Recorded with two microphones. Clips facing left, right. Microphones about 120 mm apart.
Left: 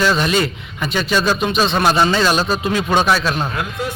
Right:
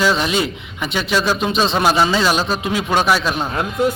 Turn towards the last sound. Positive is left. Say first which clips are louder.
# right 4 dB
turn(degrees=-30)  # may be behind; listen again after turning